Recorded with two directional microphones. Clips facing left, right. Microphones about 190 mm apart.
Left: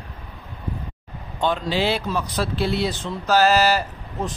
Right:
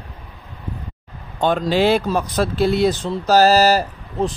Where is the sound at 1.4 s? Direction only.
50° right (ahead or behind).